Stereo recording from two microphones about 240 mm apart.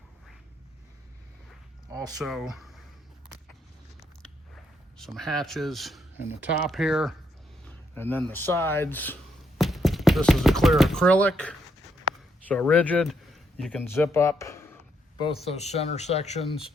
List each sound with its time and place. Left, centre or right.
2.0 s speech: centre
4.9 s speech: centre
15.4 s speech: left